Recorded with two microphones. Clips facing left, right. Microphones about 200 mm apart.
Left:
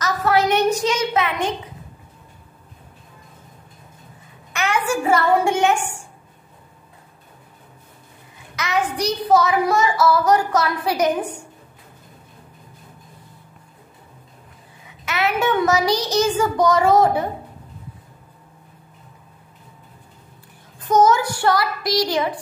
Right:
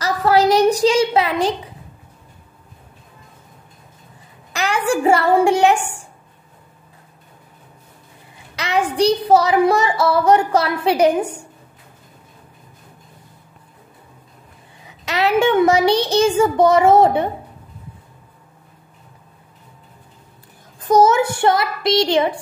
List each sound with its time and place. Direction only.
0.0 s a sound: 30° right (ahead or behind)
4.5 s a woman's voice: 35° right (ahead or behind)
8.5 s speech: 30° right (ahead or behind)
15.0 s a child's voice: 30° right (ahead or behind)
20.9 s child singing: 25° right (ahead or behind)